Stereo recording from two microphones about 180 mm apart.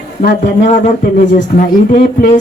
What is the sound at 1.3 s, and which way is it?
Speech, 50° left (ahead or behind).